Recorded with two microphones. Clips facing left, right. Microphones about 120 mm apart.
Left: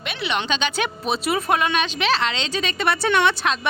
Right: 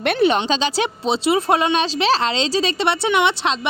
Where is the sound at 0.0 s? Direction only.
55° right (ahead or behind).